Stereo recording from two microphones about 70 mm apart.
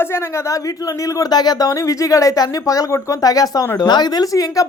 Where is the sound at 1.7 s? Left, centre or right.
Left.